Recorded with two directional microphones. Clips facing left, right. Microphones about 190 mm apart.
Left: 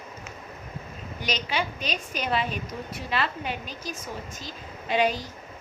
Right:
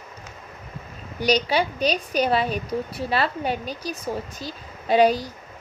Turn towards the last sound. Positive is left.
turn(degrees=-35)  # may be behind; listen again after turning